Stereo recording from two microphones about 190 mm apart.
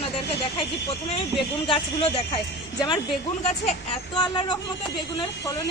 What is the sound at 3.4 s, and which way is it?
A woman's voice, 30° left (ahead or behind).